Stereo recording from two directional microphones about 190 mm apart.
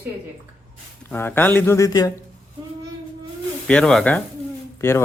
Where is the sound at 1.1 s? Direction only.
10° left (ahead or behind).